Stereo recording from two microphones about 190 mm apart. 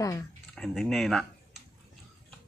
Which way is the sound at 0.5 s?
5° left (ahead or behind).